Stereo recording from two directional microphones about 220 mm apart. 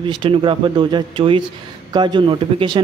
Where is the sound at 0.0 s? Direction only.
25° right (ahead or behind).